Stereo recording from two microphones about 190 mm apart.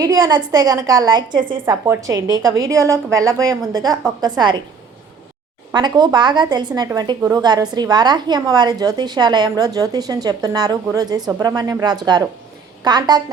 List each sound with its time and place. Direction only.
0.0 s a woman's voice: 20° right (ahead or behind)
5.7 s a woman's voice: 20° right (ahead or behind)